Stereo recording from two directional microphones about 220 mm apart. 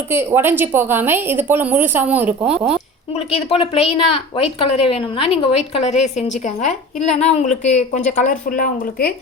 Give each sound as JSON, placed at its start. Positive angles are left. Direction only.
{"t": 0.1, "sound": "a woman's voice", "side_deg": -10}
{"t": 3.2, "sound": "a woman's voice", "side_deg": 25}